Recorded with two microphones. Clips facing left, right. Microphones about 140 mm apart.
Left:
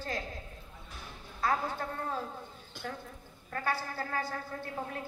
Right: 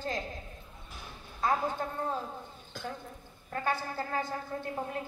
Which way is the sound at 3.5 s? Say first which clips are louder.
Right 2 dB; 20° right (ahead or behind).